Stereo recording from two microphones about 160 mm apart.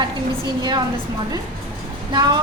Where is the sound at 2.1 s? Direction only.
25° right (ahead or behind).